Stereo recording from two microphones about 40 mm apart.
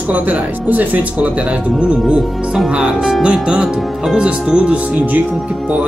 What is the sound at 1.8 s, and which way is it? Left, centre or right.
Speech, right.